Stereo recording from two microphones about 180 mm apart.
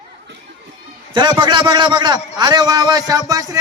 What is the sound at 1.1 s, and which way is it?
A man's voice, 25° right (ahead or behind).